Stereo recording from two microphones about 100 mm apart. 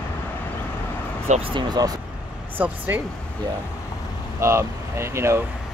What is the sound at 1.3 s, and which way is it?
Speech, 65° right (ahead or behind).